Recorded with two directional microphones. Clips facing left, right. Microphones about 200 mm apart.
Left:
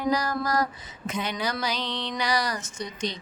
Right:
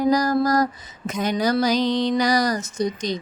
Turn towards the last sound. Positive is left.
turn(degrees=-40)  # may be behind; listen again after turning